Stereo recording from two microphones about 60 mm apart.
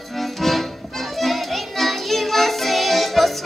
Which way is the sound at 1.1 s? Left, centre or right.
Centre.